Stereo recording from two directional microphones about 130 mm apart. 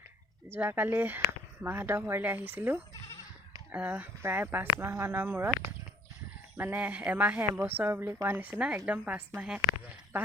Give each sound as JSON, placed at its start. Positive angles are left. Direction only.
{"t": 0.5, "sound": "a woman's voice", "side_deg": -15}
{"t": 6.6, "sound": "a woman's voice", "side_deg": -15}